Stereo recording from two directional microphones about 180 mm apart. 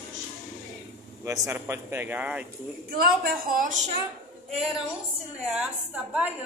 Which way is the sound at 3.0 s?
55° right (ahead or behind).